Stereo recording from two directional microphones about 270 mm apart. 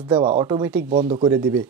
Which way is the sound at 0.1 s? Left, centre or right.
Centre.